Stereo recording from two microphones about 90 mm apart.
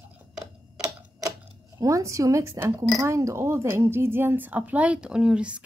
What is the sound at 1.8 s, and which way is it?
A woman's voice, 35° right (ahead or behind).